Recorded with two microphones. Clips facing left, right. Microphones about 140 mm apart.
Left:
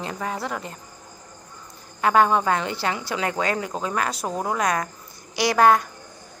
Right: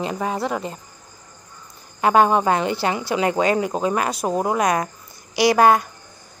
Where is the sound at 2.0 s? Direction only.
20° right (ahead or behind).